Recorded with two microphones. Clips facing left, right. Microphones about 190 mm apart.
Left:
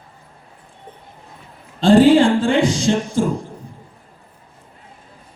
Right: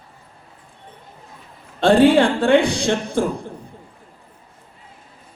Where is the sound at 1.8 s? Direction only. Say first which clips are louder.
Left 2 dB; 60° right (ahead or behind).